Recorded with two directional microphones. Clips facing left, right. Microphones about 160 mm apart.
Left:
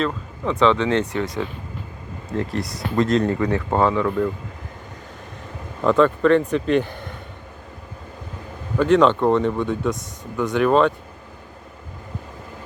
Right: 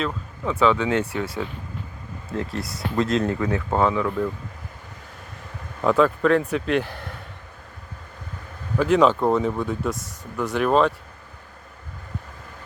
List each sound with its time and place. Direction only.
0.0 s speech: 5° right (ahead or behind)
5.8 s speech: 5° right (ahead or behind)
8.8 s speech: 5° right (ahead or behind)